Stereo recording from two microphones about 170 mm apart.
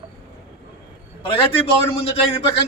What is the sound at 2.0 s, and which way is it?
Speech, 35° left (ahead or behind).